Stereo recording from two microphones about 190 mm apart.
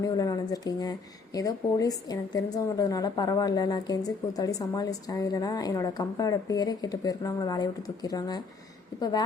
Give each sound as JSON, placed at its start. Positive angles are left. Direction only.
{"t": 0.0, "sound": "speech", "side_deg": 20}